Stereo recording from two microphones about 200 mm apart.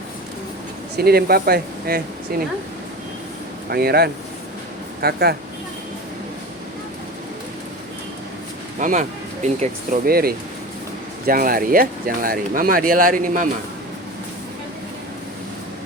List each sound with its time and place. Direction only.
0.9 s speech: 50° right (ahead or behind)
3.7 s speech: 50° right (ahead or behind)
8.8 s speech: 35° right (ahead or behind)